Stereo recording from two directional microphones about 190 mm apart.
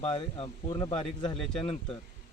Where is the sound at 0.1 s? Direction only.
30° left (ahead or behind).